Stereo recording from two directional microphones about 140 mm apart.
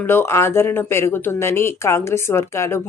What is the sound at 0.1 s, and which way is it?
Speech, 15° left (ahead or behind).